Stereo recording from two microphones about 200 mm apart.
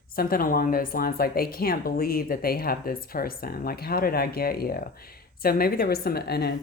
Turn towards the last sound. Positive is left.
turn(degrees=50)  # may be behind; listen again after turning